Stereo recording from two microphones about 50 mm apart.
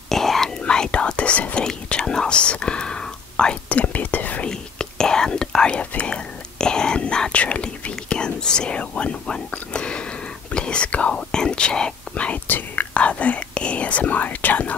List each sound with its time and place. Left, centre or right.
0.1 s whispering: centre
0.7 s whispering: centre
3.6 s speech: left
4.5 s speech: centre
12.4 s speech: left
12.9 s speech: left